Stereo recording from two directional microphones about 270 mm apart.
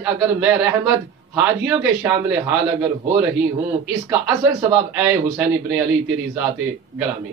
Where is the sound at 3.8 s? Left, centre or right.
Centre.